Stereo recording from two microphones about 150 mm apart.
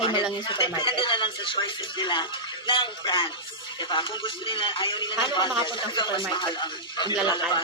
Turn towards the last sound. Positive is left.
turn(degrees=30)  # may be behind; listen again after turning